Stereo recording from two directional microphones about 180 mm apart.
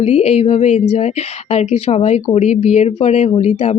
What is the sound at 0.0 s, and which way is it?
A woman's voice, 35° left (ahead or behind).